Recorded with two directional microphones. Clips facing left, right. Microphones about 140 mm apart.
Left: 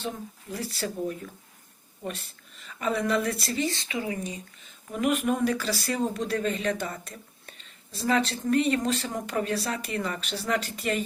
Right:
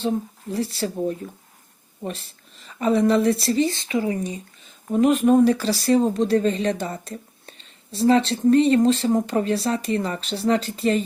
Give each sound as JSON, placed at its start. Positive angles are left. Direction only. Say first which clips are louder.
{"t": 0.0, "sound": "speech", "louder": "right 10 dB", "side_deg": -30}
{"t": 2.6, "sound": "speech", "louder": "right 8 dB", "side_deg": -30}